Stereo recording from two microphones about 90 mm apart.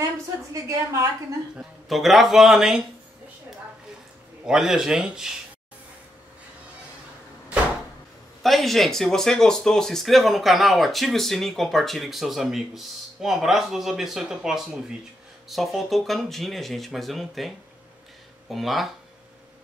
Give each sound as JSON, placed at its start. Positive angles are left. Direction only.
{"t": 0.5, "sound": "a woman's voice", "side_deg": -40}
{"t": 1.6, "sound": "speech", "side_deg": 0}
{"t": 4.5, "sound": "speech", "side_deg": -5}
{"t": 8.4, "sound": "speech", "side_deg": 0}
{"t": 18.5, "sound": "speech", "side_deg": 0}